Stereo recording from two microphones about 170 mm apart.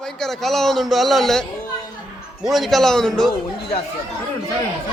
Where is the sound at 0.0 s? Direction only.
5° left (ahead or behind).